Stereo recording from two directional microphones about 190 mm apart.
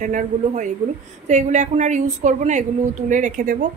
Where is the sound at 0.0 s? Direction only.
40° right (ahead or behind).